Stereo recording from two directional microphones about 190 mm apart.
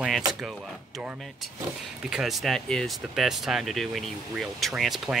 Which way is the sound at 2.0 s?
5° right (ahead or behind).